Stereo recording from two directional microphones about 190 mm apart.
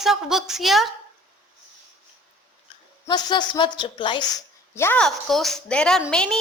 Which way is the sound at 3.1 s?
20° left (ahead or behind).